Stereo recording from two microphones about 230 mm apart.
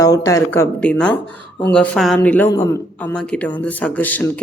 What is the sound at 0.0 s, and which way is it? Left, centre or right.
Speech, centre.